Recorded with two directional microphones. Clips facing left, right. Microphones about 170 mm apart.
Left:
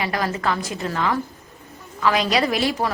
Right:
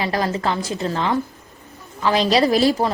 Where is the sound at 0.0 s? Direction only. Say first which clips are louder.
Right 2 dB; 30° right (ahead or behind).